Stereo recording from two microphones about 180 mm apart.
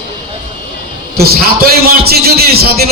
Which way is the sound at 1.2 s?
60° right (ahead or behind).